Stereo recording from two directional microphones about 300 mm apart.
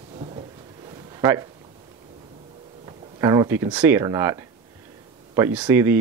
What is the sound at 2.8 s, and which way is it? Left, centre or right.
Speech, centre.